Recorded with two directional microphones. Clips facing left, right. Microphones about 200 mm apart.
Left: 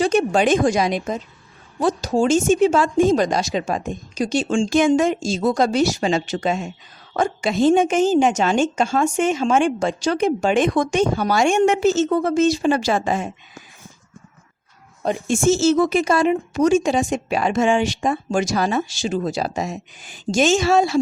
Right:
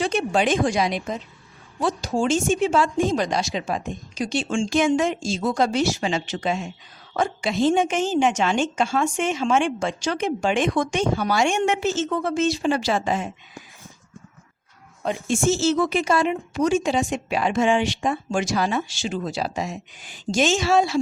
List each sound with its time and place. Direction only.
0.3 s a woman's voice: 45° left (ahead or behind)
2.6 s a woman's voice: 45° left (ahead or behind)
15.3 s a woman's voice: 45° left (ahead or behind)